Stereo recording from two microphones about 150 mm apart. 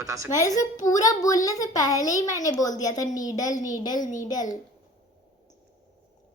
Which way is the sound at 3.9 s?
60° left (ahead or behind).